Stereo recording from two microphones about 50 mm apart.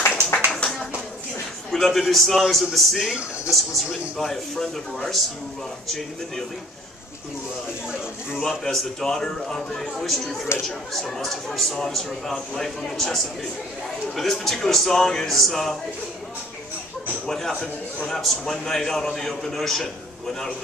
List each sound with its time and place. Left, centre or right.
0.6 s a sound: left
1.7 s speech: centre
8.5 s a man's voice: centre
17.3 s a man's voice: centre